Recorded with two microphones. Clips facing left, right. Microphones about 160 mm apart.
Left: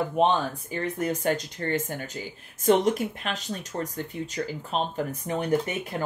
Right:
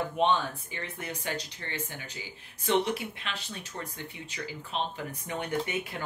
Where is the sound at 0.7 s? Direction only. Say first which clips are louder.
Left 14 dB; 45° left (ahead or behind).